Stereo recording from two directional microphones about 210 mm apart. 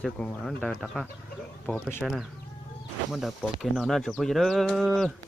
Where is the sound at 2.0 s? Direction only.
Centre (ahead or behind).